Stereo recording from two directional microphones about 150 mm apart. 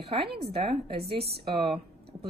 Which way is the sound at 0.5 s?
40° right (ahead or behind).